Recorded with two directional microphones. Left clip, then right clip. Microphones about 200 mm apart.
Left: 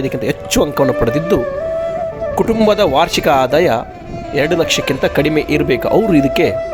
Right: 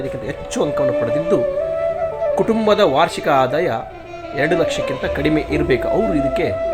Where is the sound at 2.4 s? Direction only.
45° left (ahead or behind).